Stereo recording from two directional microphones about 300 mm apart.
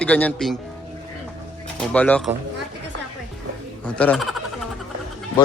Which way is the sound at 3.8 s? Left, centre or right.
Centre.